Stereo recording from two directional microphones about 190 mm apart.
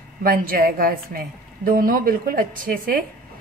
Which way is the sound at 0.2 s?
50° right (ahead or behind).